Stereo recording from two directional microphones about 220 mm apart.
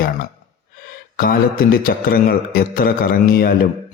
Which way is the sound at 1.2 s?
40° left (ahead or behind).